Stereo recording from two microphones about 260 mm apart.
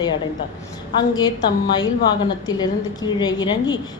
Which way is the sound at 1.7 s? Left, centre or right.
Centre.